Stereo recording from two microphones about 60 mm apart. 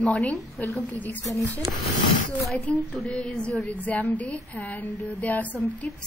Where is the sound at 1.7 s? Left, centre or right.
Right.